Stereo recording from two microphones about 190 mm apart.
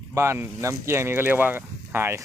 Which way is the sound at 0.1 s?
15° right (ahead or behind).